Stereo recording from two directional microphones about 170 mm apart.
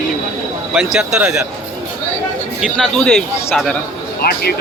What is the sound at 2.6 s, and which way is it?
Speech, centre (ahead or behind).